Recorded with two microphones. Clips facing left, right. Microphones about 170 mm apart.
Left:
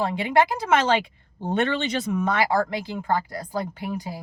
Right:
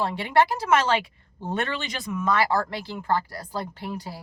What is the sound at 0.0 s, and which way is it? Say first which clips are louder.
A woman's voice: left 1 dB; 15° left (ahead or behind).